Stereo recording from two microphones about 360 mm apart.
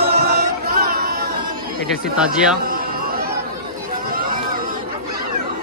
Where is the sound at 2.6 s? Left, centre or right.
Right.